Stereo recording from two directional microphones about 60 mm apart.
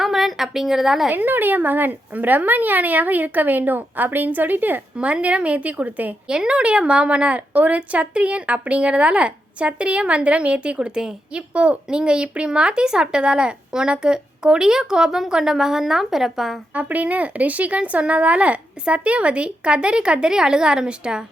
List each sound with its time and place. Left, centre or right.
0.0 s a sound: centre
1.1 s a woman's voice: right
4.9 s speech: centre
6.2 s a woman's voice: centre
16.7 s speech: right